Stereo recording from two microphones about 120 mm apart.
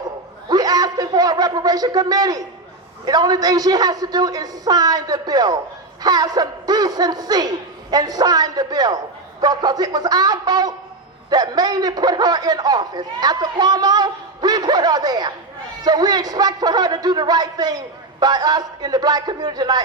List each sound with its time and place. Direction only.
0.4 s a man's voice: 30° right (ahead or behind)